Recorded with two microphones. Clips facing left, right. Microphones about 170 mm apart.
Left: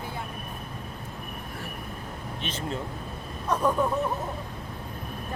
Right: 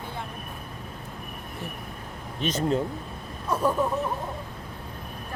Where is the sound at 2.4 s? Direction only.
40° right (ahead or behind).